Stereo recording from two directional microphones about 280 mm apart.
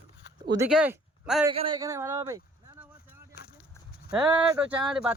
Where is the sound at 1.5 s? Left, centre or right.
Centre.